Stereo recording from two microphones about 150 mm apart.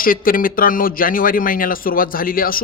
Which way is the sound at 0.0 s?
70° left (ahead or behind).